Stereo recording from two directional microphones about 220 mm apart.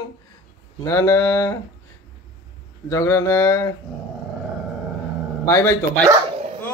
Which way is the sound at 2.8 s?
15° left (ahead or behind).